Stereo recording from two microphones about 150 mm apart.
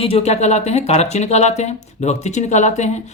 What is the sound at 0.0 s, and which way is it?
Speech, 40° left (ahead or behind).